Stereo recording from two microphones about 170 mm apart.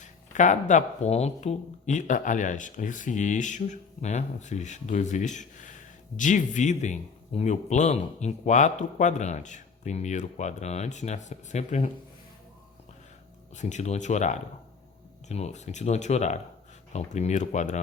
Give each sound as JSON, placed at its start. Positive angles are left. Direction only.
{"t": 0.0, "sound": "speech", "side_deg": 45}
{"t": 13.6, "sound": "speech", "side_deg": 45}